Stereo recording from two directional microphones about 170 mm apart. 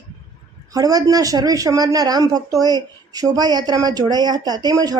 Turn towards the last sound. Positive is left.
turn(degrees=-25)  # may be behind; listen again after turning